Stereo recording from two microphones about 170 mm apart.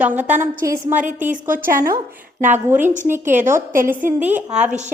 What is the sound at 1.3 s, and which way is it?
Speech, 55° right (ahead or behind).